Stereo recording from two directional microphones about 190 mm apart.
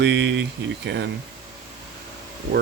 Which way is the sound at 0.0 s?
70° right (ahead or behind).